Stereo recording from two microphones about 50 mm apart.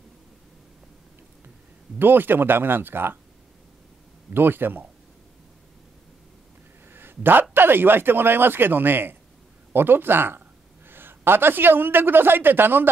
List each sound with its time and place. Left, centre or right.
2.0 s speech: right
4.3 s speech: right
6.9 s a sound: right
7.5 s a man's voice: right